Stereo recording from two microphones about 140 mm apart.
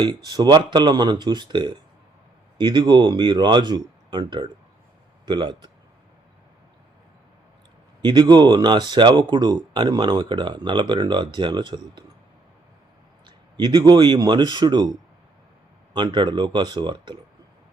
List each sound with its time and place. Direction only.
0.0 s speech: 30° right (ahead or behind)
8.0 s speech: 30° right (ahead or behind)
13.2 s speech: 30° right (ahead or behind)
15.9 s speech: 35° right (ahead or behind)